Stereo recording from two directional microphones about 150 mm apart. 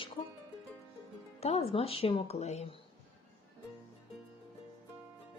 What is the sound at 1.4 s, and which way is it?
Speech, 45° left (ahead or behind).